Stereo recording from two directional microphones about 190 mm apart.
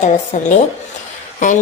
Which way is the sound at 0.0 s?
40° left (ahead or behind).